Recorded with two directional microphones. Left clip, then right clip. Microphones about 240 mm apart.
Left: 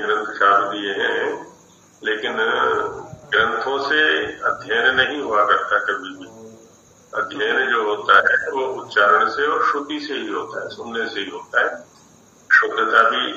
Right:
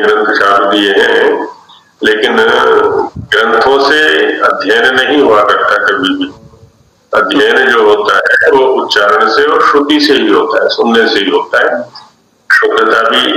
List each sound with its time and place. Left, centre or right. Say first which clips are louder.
0.0 s speech: right 10 dB; right